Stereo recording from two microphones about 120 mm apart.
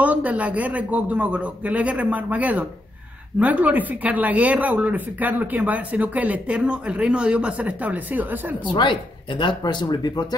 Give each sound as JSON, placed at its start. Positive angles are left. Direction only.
{"t": 0.0, "sound": "speech", "side_deg": -10}
{"t": 8.7, "sound": "speech", "side_deg": 40}